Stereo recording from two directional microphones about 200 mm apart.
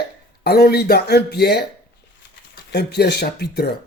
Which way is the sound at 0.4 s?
55° left (ahead or behind).